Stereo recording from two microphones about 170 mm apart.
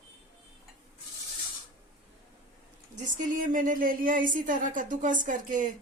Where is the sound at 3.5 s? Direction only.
50° right (ahead or behind).